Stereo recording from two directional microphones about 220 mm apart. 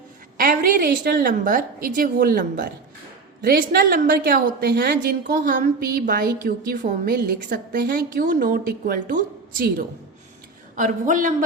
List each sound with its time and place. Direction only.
0.3 s a woman's voice: 40° right (ahead or behind)